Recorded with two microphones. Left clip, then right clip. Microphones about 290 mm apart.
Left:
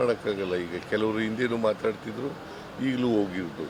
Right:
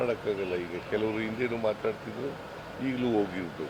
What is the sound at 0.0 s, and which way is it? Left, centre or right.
Speech, left.